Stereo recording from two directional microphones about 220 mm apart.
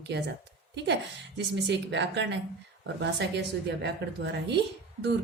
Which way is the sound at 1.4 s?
50° right (ahead or behind).